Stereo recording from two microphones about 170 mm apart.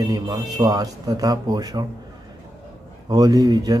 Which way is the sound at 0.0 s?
20° right (ahead or behind).